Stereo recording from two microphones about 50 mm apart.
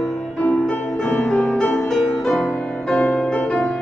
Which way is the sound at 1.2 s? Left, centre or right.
Left.